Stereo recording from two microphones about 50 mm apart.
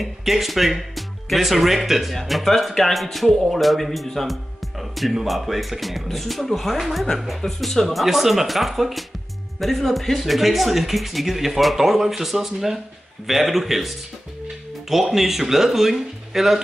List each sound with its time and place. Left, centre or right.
0.0 s speech: centre